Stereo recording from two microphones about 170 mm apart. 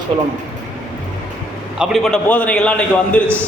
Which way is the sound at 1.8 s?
Centre (ahead or behind).